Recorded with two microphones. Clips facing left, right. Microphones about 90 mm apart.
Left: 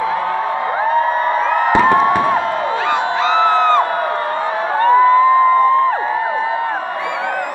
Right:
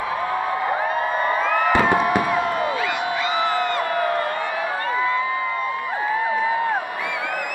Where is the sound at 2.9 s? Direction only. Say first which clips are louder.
Left 7 dB; 30° left (ahead or behind).